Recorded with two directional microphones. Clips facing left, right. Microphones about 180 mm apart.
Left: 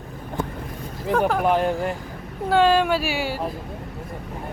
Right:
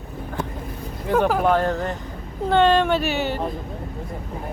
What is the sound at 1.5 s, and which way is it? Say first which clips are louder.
Speech: right 1 dB; 10° left (ahead or behind).